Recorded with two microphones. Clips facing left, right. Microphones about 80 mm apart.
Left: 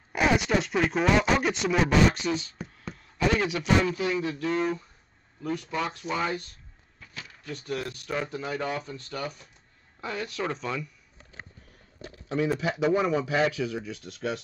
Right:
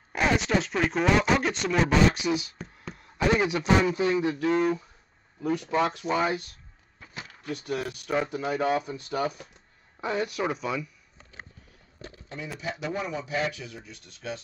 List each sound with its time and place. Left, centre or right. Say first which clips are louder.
0.1 s speech: left 1 dB; centre
2.1 s speech: right 2 dB; centre
2.9 s a man's voice: right 1 dB; right
7.5 s speech: right 1 dB; centre
12.4 s speech: left 7 dB; left